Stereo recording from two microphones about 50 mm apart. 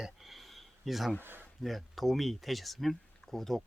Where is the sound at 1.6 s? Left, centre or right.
Centre.